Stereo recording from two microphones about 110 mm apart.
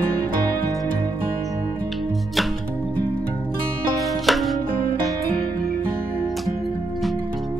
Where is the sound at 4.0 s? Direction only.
Centre (ahead or behind).